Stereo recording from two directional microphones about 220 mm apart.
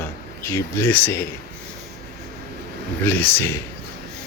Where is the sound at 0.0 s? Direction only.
10° left (ahead or behind).